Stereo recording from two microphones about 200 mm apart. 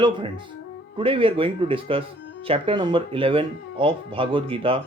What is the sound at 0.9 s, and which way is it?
Speech, 25° right (ahead or behind).